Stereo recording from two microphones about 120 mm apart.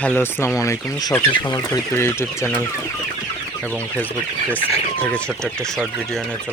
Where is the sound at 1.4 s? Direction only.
35° left (ahead or behind).